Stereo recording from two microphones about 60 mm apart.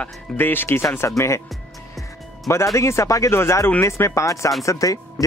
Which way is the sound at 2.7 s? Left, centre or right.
Left.